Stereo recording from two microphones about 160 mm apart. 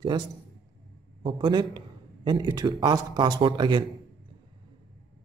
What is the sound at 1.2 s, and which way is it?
Speech, 30° right (ahead or behind).